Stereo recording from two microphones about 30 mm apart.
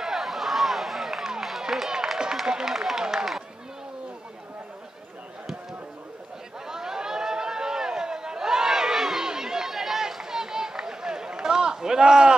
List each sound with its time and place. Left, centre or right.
0.0 s a sound: centre
1.6 s run: centre
2.7 s run: centre
3.0 s run: right
6.7 s a sound: centre
9.3 s chatter: centre
9.7 s run: centre
10.1 s run: centre